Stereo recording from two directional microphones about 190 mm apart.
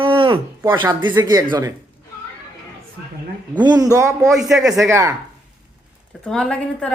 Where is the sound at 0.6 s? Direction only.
10° right (ahead or behind).